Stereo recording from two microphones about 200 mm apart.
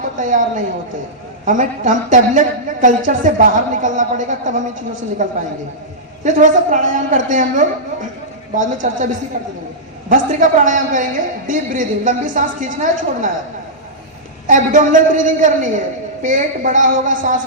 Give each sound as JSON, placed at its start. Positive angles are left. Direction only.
{"t": 0.2, "sound": "a woman's voice", "side_deg": -40}
{"t": 10.1, "sound": "a woman's voice", "side_deg": -40}
{"t": 14.4, "sound": "a woman's voice", "side_deg": -40}